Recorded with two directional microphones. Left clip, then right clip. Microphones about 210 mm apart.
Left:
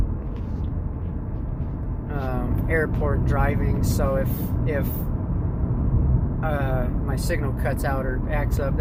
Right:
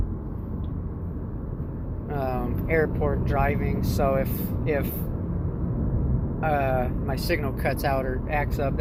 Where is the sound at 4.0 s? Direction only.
30° right (ahead or behind).